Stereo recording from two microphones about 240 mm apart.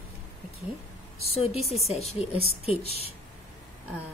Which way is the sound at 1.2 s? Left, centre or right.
Left.